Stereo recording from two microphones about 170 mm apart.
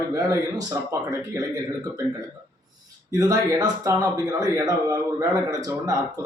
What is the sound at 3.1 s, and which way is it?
Speech, 20° right (ahead or behind).